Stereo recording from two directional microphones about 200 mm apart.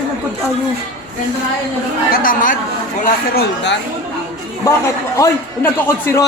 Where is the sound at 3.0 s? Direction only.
55° left (ahead or behind).